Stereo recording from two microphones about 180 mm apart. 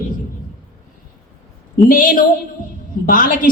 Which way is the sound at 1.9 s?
50° left (ahead or behind).